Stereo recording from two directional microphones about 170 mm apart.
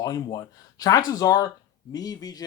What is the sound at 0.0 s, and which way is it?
Speech, 20° left (ahead or behind).